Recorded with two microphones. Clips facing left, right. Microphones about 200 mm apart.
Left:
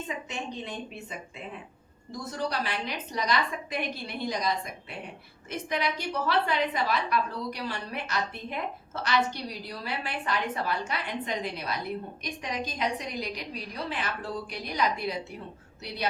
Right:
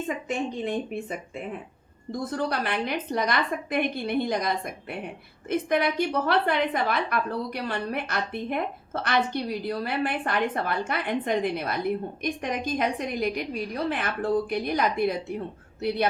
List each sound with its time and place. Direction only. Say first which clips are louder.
0.3 s a woman's voice: right 8 dB; 50° right (ahead or behind)
2.3 s a woman's voice: right 3 dB; 55° right (ahead or behind)